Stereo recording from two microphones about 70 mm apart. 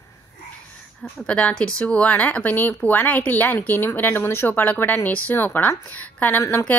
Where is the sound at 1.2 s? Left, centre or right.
Centre.